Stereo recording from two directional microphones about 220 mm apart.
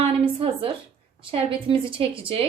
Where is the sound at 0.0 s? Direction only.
25° right (ahead or behind).